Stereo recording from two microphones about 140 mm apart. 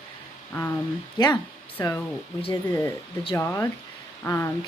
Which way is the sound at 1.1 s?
30° left (ahead or behind).